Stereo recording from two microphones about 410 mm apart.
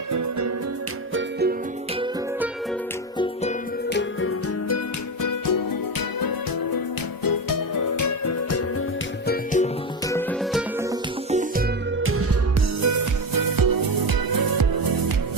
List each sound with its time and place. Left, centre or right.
0.1 s music: right
1.1 s music: right
3.8 s music: left
5.2 s music: left
9.2 s music: centre
10.1 s music: centre
11.3 s music: centre
12.0 s music: right
12.8 s music: right